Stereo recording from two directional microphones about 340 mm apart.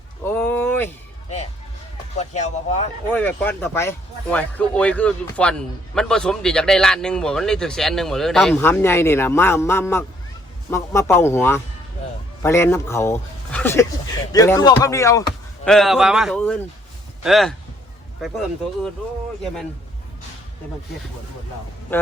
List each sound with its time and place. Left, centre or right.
0.3 s a sound: centre
2.1 s speech: centre
3.1 s a man's voice: centre
21.9 s a man's voice: centre